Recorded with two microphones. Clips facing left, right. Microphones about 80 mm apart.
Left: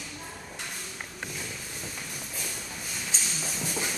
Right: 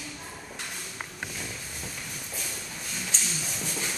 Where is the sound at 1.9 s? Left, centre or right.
Centre.